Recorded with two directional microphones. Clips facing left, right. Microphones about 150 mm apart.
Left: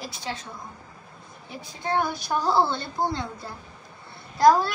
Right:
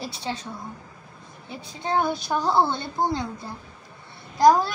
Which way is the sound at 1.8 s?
25° right (ahead or behind).